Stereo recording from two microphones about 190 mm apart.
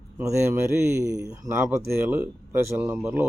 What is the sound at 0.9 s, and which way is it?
A man's voice, 15° right (ahead or behind).